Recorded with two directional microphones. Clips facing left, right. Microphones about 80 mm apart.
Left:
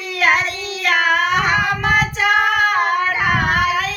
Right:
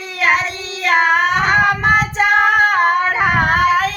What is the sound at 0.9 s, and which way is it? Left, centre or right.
Child singing, right.